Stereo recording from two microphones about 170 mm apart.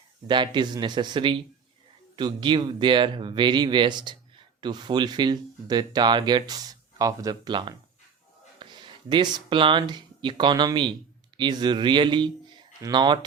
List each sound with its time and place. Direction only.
0.3 s a man's voice: 25° right (ahead or behind)